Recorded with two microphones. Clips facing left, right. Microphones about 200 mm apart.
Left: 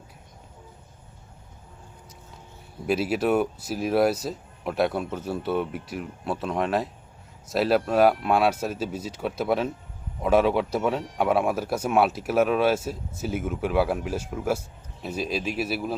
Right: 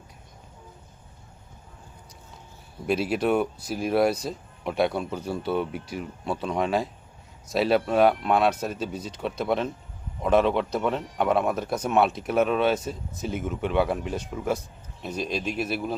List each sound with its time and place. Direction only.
2.8 s speech: centre (ahead or behind)